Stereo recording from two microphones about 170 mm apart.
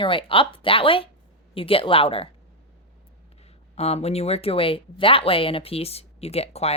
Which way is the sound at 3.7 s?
40° left (ahead or behind).